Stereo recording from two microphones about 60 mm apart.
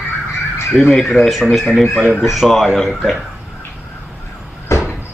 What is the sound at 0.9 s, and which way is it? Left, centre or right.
Speech, centre.